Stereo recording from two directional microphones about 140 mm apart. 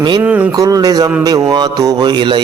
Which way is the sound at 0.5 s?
25° right (ahead or behind).